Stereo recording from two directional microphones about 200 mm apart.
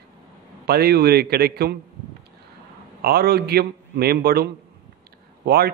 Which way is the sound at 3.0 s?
50° right (ahead or behind).